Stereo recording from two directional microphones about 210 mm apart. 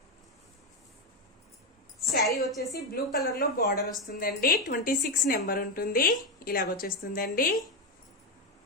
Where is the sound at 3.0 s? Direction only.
45° left (ahead or behind).